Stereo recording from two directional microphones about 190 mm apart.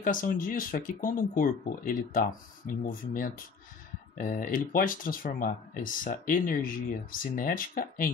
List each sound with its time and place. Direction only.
0.0 s speech: 45° left (ahead or behind)